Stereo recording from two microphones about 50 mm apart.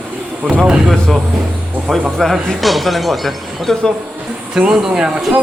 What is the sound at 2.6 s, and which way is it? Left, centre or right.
Speech, centre.